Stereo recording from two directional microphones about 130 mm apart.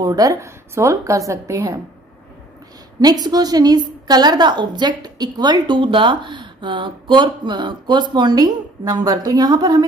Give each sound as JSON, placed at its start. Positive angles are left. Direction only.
{"t": 0.0, "sound": "a woman's voice", "side_deg": -30}
{"t": 3.0, "sound": "a woman's voice", "side_deg": -30}